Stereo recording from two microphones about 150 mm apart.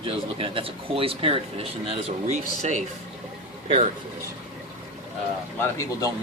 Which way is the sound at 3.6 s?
35° right (ahead or behind).